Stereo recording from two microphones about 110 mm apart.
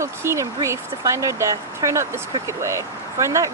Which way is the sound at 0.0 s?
25° right (ahead or behind).